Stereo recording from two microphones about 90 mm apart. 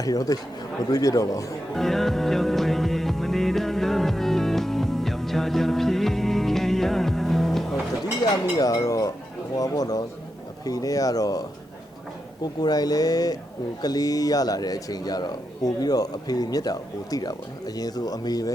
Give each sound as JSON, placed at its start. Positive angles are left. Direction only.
{"t": 0.0, "sound": "speech", "side_deg": 45}
{"t": 1.7, "sound": "music", "side_deg": 5}
{"t": 8.2, "sound": "speech", "side_deg": 45}